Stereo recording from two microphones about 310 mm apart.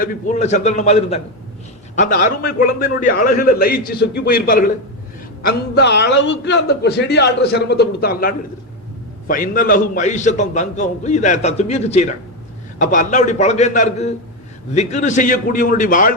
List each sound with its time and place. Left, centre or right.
0.0 s a man's voice: left